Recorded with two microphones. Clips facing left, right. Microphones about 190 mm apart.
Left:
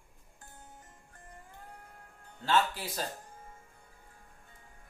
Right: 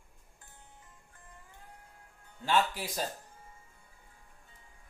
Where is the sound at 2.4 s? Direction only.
15° right (ahead or behind).